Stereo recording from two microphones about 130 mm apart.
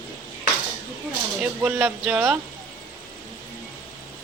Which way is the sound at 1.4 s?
15° right (ahead or behind).